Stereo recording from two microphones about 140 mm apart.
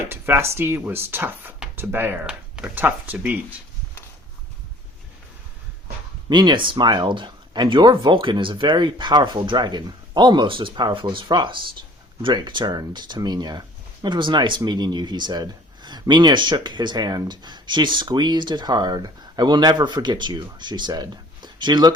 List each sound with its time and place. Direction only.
0.1 s speech: 15° right (ahead or behind)
6.2 s speech: 30° right (ahead or behind)